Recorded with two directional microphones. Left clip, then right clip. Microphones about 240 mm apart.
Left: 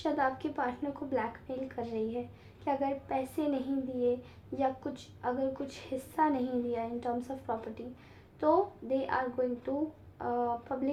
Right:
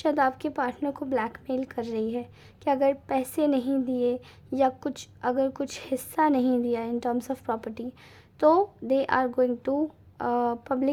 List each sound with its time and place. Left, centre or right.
0.0 s a woman's voice: right